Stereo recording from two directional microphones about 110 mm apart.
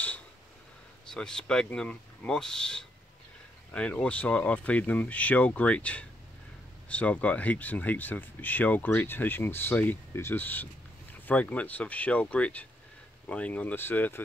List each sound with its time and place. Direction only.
1.1 s speech: 5° left (ahead or behind)